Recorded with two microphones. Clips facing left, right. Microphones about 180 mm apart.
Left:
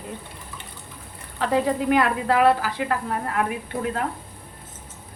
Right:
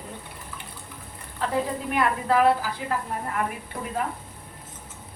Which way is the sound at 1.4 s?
80° left.